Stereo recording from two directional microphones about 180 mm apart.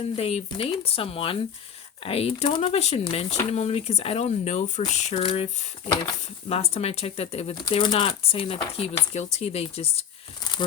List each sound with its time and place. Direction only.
0.2 s speech: 35° left (ahead or behind)
6.5 s speech: 35° left (ahead or behind)